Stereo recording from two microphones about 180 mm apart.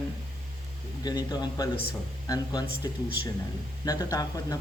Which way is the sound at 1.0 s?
20° left (ahead or behind).